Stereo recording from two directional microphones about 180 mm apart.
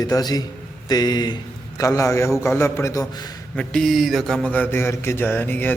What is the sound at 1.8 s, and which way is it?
Mantra, 15° left (ahead or behind).